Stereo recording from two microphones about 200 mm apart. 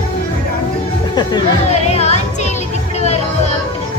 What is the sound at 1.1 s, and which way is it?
Music, 20° left (ahead or behind).